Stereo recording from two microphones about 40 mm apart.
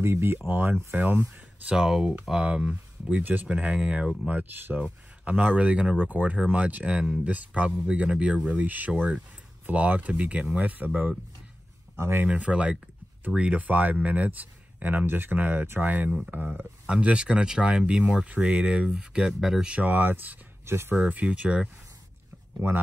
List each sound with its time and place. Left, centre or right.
0.0 s speech: right
0.5 s speech: right
1.8 s speech: centre
2.4 s speech: right
4.3 s speech: right
4.7 s speech: right
12.4 s speech: right
15.3 s speech: right
16.8 s speech: right
18.9 s speech: centre
19.8 s speech: right
20.6 s speech: right
21.1 s speech: right
22.6 s speech: right